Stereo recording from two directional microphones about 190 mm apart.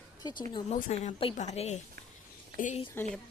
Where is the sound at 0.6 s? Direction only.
35° left (ahead or behind).